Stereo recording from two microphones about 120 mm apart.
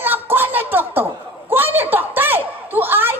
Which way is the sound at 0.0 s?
15° right (ahead or behind).